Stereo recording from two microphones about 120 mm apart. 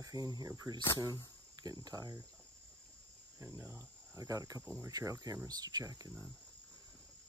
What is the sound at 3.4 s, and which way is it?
Cricket, 20° right (ahead or behind).